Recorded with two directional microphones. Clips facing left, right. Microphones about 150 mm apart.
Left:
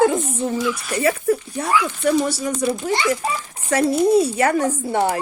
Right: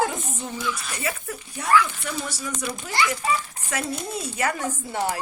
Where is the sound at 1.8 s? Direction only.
65° left (ahead or behind).